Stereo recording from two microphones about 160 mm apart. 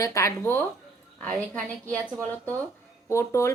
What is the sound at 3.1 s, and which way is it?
Female singing, 20° left (ahead or behind).